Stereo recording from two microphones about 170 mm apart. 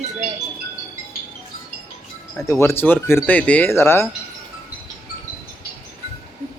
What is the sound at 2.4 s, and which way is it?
Speech, 15° left (ahead or behind).